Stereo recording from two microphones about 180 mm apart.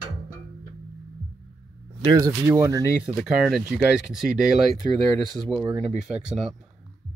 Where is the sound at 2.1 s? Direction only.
20° right (ahead or behind).